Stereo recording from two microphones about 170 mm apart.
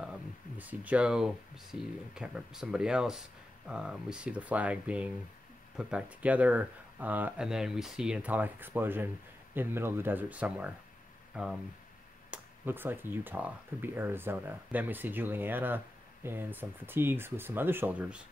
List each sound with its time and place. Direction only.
0.6 s speech: 10° right (ahead or behind)